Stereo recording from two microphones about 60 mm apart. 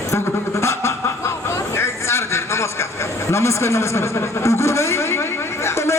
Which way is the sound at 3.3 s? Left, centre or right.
Left.